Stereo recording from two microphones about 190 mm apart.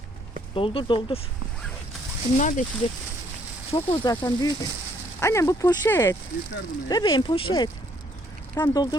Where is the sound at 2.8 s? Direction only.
30° left (ahead or behind).